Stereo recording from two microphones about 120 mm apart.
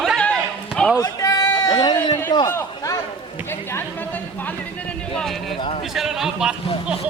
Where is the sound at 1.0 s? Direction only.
30° left (ahead or behind).